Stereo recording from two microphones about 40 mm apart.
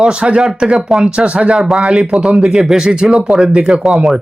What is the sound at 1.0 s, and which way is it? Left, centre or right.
Speech, right.